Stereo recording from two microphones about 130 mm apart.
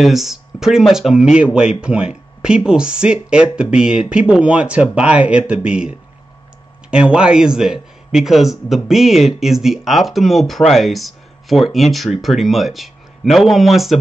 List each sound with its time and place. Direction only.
0.0 s a man's voice: centre (ahead or behind)